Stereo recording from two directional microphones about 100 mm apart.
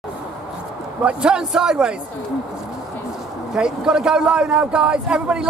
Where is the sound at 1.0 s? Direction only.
10° right (ahead or behind).